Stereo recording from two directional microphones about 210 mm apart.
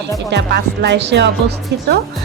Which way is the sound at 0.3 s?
55° right (ahead or behind).